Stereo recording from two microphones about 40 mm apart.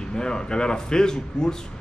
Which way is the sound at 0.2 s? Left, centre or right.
Centre.